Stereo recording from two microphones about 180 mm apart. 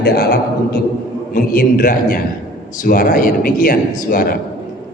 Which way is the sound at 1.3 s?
55° left (ahead or behind).